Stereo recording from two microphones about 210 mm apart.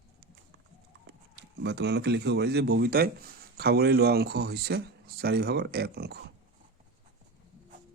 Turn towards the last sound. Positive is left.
turn(degrees=-50)  # may be behind; listen again after turning